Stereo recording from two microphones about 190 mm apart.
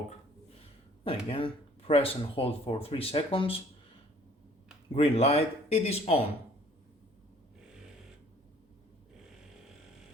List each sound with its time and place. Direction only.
1.0 s speech: 30° left (ahead or behind)
4.9 s speech: 30° left (ahead or behind)